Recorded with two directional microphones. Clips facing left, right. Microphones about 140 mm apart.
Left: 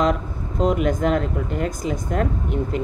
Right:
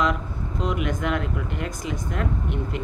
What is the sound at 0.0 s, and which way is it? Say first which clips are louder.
Speech: left 4 dB; 40° left (ahead or behind).